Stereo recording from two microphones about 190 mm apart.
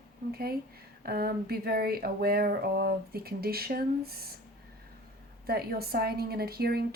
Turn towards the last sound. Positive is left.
turn(degrees=-55)  # may be behind; listen again after turning